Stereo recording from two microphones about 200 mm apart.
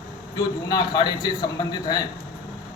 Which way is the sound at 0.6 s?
20° left (ahead or behind).